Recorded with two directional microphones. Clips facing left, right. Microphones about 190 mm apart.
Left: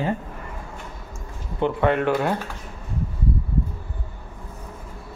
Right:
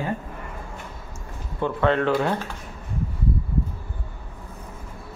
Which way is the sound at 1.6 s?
10° left (ahead or behind).